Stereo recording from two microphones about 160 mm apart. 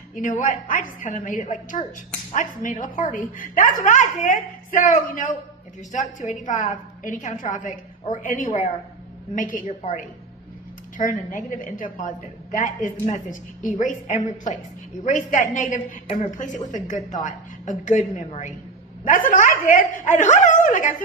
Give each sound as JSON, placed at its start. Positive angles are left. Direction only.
{"t": 0.2, "sound": "a woman's voice", "side_deg": 55}